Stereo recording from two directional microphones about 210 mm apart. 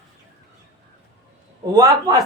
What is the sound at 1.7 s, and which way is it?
Speech, 15° right (ahead or behind).